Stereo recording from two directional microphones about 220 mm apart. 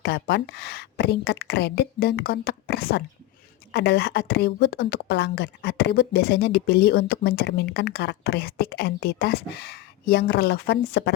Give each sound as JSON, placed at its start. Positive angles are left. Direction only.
{"t": 0.0, "sound": "a woman's voice", "side_deg": 50}